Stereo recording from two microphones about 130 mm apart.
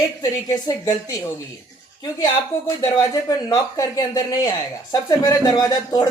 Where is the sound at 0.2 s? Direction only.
30° left (ahead or behind).